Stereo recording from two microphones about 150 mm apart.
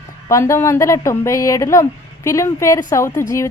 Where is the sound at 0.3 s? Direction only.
20° left (ahead or behind).